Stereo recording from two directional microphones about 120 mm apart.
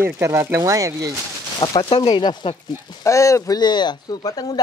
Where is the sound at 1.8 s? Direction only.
40° left (ahead or behind).